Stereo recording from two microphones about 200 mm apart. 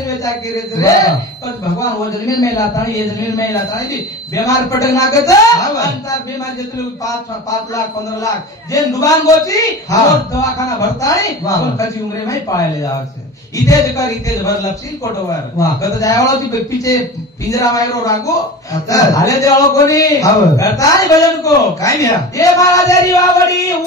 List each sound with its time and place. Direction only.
0.7 s speech: 15° left (ahead or behind)
8.7 s speech: 20° left (ahead or behind)
13.7 s speech: 15° left (ahead or behind)
17.5 s speech: 15° left (ahead or behind)